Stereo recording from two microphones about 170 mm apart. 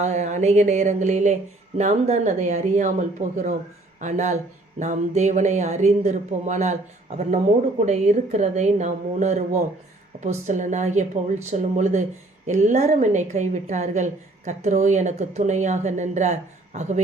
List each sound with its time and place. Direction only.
0.0 s a woman's voice: 45° right (ahead or behind)